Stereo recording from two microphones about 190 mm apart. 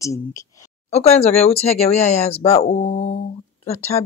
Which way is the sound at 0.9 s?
35° left (ahead or behind).